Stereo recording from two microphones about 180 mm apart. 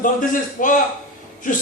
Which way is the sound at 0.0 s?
45° left (ahead or behind).